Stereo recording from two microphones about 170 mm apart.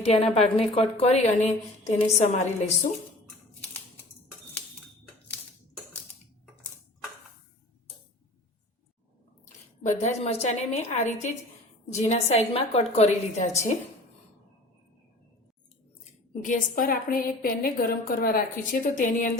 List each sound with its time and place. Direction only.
0.0 s a woman's voice: 40° left (ahead or behind)
9.8 s a woman's voice: 40° left (ahead or behind)
16.3 s a woman's voice: 50° left (ahead or behind)